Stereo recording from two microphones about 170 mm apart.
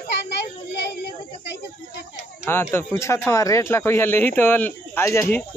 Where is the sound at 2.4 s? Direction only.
15° left (ahead or behind).